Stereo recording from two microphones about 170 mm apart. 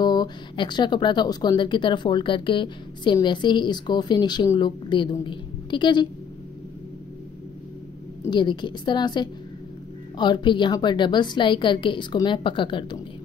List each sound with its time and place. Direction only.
0.0 s speech: 25° left (ahead or behind)
8.3 s speech: 25° left (ahead or behind)